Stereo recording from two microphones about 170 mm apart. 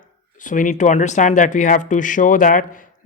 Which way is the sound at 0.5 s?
50° left (ahead or behind).